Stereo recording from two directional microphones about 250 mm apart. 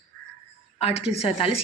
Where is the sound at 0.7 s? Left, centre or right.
Left.